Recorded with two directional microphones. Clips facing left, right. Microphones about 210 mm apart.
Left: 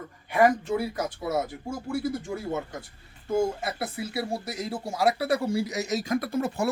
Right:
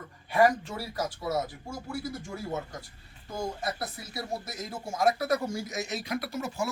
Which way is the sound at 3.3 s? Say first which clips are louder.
Left 7 dB; 25° left (ahead or behind).